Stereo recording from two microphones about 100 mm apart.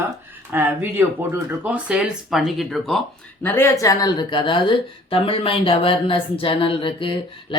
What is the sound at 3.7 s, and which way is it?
Speech, 35° left (ahead or behind).